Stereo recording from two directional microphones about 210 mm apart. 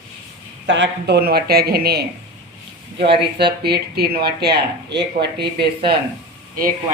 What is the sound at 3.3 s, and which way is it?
Speech, 50° right (ahead or behind).